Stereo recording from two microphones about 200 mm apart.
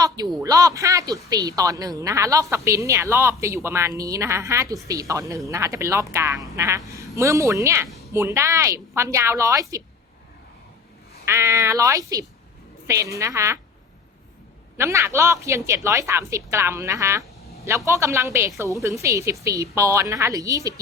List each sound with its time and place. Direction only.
0.4 s a woman's voice: 15° right (ahead or behind)
11.3 s a woman's voice: 15° right (ahead or behind)
14.8 s a woman's voice: 15° right (ahead or behind)